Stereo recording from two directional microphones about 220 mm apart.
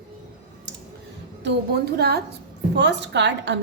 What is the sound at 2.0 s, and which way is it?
A woman's voice, 50° right (ahead or behind).